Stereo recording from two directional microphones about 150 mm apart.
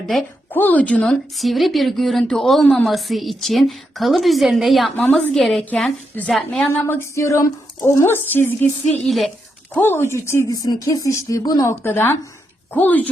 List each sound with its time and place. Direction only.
0.1 s speech: centre (ahead or behind)
6.7 s speech: 15° left (ahead or behind)
9.0 s speech: centre (ahead or behind)
9.7 s a woman's voice: 15° left (ahead or behind)